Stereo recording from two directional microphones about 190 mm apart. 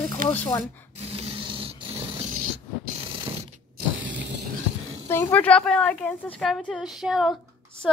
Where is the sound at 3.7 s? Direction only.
70° right (ahead or behind).